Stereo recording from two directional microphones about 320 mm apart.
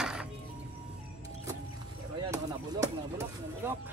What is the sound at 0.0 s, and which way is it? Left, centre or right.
Music, centre.